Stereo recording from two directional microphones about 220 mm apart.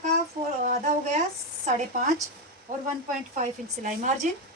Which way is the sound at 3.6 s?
40° right (ahead or behind).